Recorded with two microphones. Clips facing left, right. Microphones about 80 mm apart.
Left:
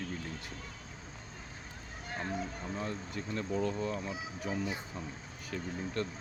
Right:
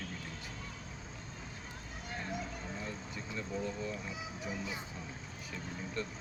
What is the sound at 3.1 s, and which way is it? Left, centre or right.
Speech, left.